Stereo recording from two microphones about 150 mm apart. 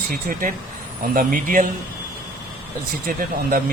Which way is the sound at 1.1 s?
65° right (ahead or behind).